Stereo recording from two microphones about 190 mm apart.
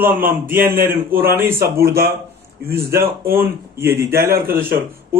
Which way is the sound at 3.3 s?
15° right (ahead or behind).